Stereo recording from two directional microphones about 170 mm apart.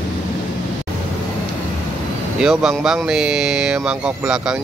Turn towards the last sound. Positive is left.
turn(degrees=-5)  # may be behind; listen again after turning